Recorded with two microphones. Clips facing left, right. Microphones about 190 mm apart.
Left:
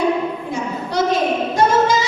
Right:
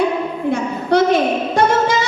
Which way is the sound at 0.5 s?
60° right (ahead or behind).